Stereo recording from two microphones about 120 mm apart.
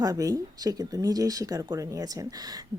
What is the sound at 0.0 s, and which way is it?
Speech, 30° right (ahead or behind).